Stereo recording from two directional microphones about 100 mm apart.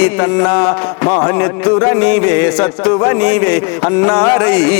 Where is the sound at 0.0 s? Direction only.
20° left (ahead or behind).